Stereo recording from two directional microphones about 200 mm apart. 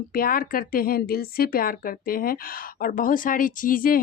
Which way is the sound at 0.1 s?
45° left (ahead or behind).